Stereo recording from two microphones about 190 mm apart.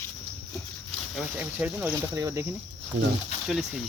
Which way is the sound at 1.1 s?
10° right (ahead or behind).